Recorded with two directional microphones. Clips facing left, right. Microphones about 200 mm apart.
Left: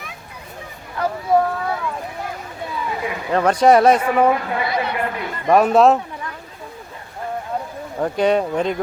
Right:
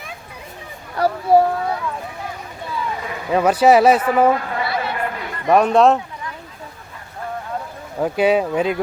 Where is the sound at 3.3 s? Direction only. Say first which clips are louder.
Right 1 dB; 5° right (ahead or behind).